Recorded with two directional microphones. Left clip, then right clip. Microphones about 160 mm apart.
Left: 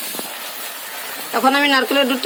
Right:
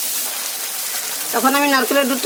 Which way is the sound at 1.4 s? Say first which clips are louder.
Left 1 dB; 50° right (ahead or behind).